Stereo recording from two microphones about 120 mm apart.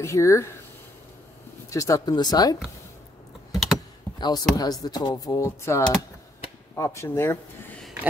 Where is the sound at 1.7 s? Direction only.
25° left (ahead or behind).